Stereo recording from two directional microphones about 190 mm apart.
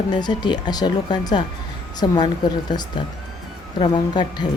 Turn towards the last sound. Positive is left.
turn(degrees=25)  # may be behind; listen again after turning